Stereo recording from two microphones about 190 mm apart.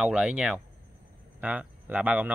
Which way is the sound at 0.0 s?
5° right (ahead or behind).